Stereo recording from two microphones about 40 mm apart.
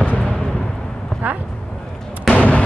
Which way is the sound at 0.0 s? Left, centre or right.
Left.